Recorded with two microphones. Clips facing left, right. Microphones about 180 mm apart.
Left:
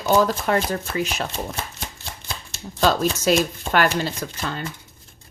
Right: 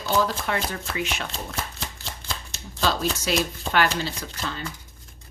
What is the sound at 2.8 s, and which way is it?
A woman's voice, 45° left (ahead or behind).